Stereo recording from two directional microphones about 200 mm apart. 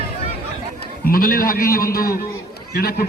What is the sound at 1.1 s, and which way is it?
A man's voice, 45° left (ahead or behind).